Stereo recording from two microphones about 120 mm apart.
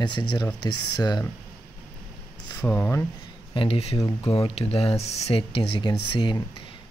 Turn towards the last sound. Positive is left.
turn(degrees=40)  # may be behind; listen again after turning